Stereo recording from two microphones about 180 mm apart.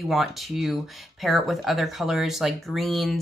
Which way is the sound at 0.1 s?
Centre (ahead or behind).